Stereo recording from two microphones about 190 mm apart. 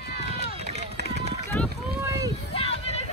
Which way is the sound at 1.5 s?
5° left (ahead or behind).